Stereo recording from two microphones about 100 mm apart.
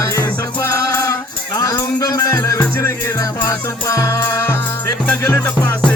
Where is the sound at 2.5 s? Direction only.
25° left (ahead or behind).